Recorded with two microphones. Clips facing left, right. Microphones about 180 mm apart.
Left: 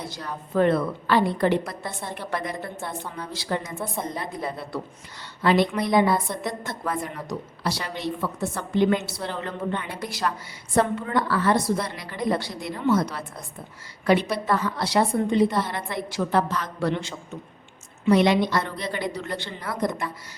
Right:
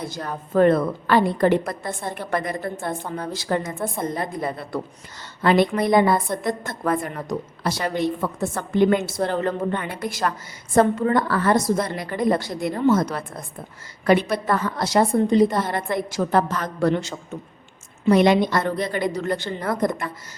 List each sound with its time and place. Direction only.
0.0 s a woman's voice: 50° right (ahead or behind)